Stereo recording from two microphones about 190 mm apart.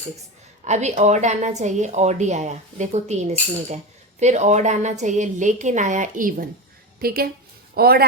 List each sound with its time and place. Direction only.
0.6 s a woman's voice: 35° right (ahead or behind); by 8.0 s 55° right (ahead or behind)